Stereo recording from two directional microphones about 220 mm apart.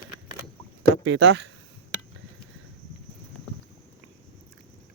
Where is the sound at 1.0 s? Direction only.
55° right (ahead or behind).